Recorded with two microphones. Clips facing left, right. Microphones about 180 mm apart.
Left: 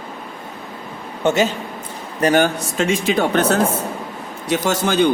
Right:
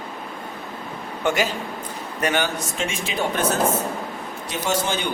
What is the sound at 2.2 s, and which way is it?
Speech, 35° left (ahead or behind).